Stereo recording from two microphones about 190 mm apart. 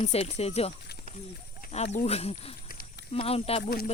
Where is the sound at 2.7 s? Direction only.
50° left (ahead or behind).